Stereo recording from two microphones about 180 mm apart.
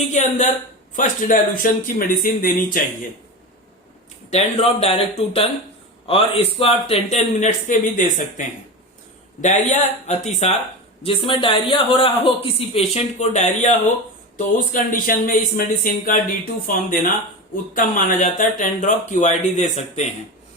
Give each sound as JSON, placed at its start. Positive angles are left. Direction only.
{"t": 0.1, "sound": "a sound", "side_deg": 40}
{"t": 0.9, "sound": "speech", "side_deg": 45}
{"t": 4.3, "sound": "speech", "side_deg": 35}